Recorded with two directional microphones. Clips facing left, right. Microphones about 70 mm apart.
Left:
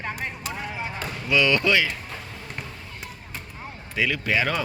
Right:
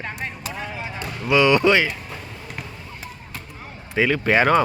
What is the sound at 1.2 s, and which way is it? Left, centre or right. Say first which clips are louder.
Speech: right 5 dB; right.